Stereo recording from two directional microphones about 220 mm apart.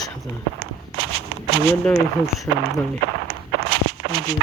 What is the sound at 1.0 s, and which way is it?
Walk, 75° right (ahead or behind).